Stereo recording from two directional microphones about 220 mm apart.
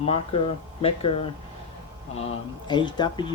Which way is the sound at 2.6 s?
20° left (ahead or behind).